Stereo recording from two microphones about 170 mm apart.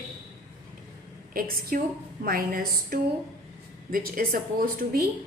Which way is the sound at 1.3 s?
60° right (ahead or behind).